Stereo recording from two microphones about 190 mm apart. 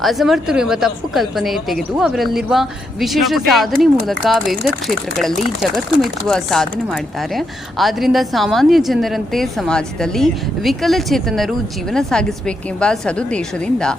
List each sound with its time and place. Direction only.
0.0 s a woman's voice: centre (ahead or behind)